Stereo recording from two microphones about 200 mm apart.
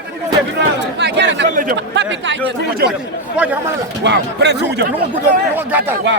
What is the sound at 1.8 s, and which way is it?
Speech, 65° right (ahead or behind).